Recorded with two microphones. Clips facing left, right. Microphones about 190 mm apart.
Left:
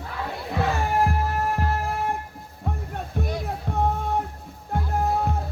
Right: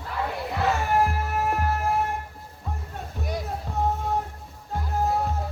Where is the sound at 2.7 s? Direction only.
60° left (ahead or behind).